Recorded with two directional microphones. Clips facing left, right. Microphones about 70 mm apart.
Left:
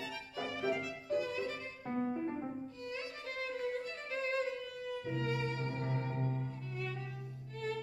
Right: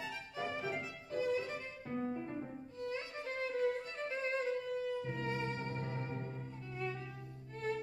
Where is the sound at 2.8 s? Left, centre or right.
Right.